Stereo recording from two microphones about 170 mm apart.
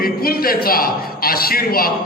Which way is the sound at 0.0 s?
60° left (ahead or behind).